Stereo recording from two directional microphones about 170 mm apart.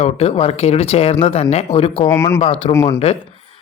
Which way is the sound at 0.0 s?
35° left (ahead or behind).